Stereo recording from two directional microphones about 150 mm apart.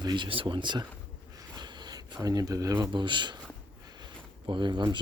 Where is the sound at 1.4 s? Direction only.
30° right (ahead or behind).